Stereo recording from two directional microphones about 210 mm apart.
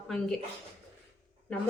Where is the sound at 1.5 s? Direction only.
5° left (ahead or behind).